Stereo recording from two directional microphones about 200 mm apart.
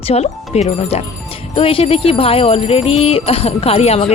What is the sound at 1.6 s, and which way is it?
Jingle bell, 30° left (ahead or behind).